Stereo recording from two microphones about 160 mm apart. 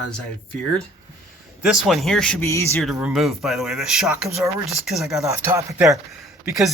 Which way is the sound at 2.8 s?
Centre (ahead or behind).